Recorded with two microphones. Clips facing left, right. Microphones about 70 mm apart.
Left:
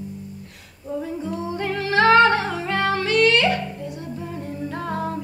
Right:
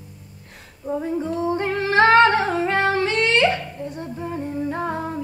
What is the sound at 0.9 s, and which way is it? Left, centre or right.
Humming, right.